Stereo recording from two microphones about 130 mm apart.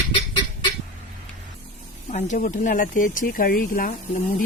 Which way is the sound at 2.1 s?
70° left (ahead or behind).